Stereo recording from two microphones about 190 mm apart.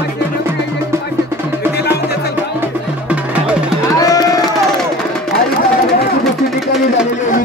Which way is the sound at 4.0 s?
20° left (ahead or behind).